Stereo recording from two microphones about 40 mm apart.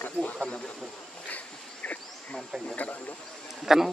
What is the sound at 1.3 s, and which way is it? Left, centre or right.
Insect, left.